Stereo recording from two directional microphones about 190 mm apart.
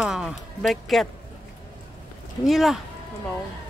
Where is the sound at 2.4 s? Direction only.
Centre (ahead or behind).